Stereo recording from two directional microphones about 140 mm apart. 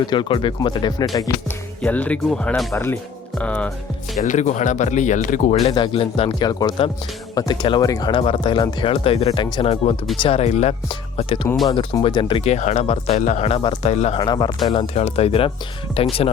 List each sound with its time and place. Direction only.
0.1 s speech: 35° left (ahead or behind)
1.8 s speech: 10° left (ahead or behind)
2.7 s speech: 15° left (ahead or behind)
4.2 s speech: 60° left (ahead or behind)
5.5 s speech: 40° left (ahead or behind)
6.4 s speech: 30° left (ahead or behind)
12.5 s speech: 55° left (ahead or behind)
13.1 s speech: 60° left (ahead or behind); by 13.7 s 40° left (ahead or behind)
13.8 s speech: 50° left (ahead or behind)
14.2 s speech: 35° left (ahead or behind)
14.7 s speech: 45° left (ahead or behind)